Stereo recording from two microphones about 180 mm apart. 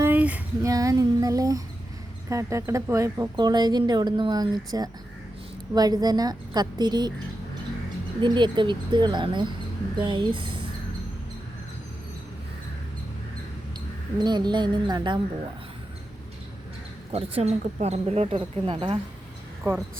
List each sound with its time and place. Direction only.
0.0 s child singing: 10° right (ahead or behind)
0.7 s a woman's voice: 20° right (ahead or behind)
8.2 s a woman's voice: 25° right (ahead or behind)
14.2 s a woman's voice: 25° right (ahead or behind)
17.3 s a woman's voice: 35° right (ahead or behind)